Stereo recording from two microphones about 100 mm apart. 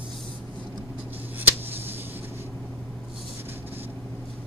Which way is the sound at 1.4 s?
20° right (ahead or behind).